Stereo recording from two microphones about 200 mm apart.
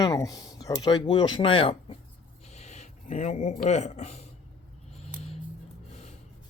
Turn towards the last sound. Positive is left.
turn(degrees=30)  # may be behind; listen again after turning